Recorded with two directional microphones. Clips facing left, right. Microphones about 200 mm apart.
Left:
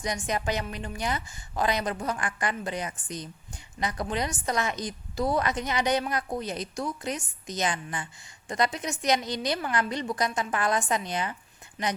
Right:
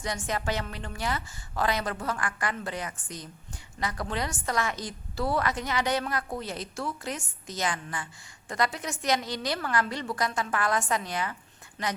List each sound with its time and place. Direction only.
0.0 s a woman's voice: 15° left (ahead or behind)